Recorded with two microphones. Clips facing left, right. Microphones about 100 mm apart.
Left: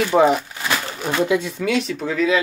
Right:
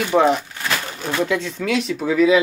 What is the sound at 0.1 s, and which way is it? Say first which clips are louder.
Speech: even; 5° left (ahead or behind).